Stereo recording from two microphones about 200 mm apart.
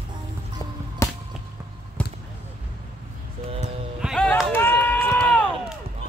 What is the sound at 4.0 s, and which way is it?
Run, centre (ahead or behind).